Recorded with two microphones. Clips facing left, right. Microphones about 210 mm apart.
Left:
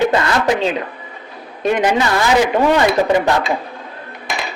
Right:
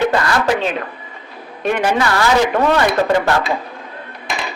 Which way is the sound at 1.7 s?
20° left (ahead or behind).